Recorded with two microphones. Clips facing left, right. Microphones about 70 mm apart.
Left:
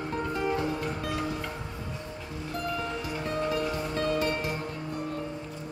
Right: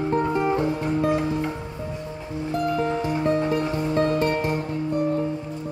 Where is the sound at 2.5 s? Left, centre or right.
Right.